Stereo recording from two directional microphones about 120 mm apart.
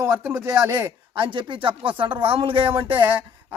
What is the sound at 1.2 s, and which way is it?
Speech, 45° right (ahead or behind).